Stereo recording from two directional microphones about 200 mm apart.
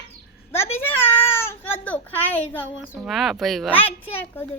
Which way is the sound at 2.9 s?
Centre (ahead or behind).